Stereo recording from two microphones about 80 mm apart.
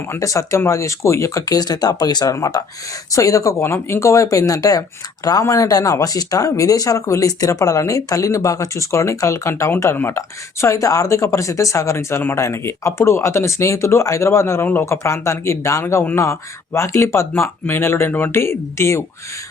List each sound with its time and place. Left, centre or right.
0.2 s speech: left